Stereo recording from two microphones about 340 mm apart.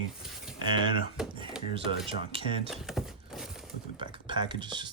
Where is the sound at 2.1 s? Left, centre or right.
Centre.